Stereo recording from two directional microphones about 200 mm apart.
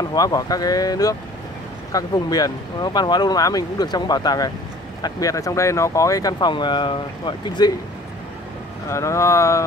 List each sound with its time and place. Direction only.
0.1 s speech: 20° left (ahead or behind)
8.8 s speech: 15° left (ahead or behind)